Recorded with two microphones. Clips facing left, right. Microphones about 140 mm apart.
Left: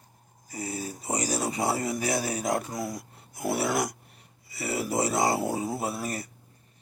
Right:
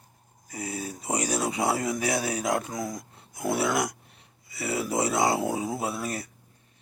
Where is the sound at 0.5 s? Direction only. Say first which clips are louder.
Even; centre (ahead or behind).